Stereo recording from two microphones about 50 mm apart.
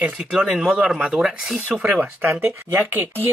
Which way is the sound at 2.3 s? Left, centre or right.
Right.